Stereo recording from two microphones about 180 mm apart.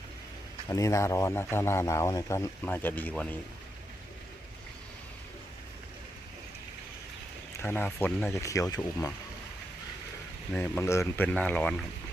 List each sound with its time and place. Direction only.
0.7 s a man's voice: 20° left (ahead or behind)
7.5 s a man's voice: 10° left (ahead or behind)
10.5 s a man's voice: 15° left (ahead or behind)